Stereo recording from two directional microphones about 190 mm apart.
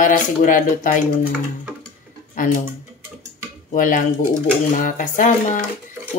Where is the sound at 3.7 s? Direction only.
45° left (ahead or behind).